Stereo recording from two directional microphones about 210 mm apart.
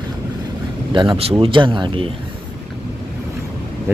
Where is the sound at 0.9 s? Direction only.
20° right (ahead or behind).